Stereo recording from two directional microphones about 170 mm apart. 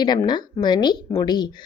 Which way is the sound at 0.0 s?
25° left (ahead or behind).